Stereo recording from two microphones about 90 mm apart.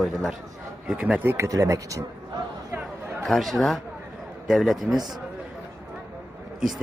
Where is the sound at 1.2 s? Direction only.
25° right (ahead or behind).